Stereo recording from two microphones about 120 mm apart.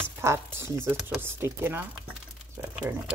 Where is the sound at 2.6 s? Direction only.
15° right (ahead or behind).